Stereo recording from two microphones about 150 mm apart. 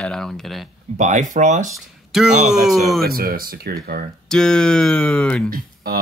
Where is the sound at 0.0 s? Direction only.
5° left (ahead or behind).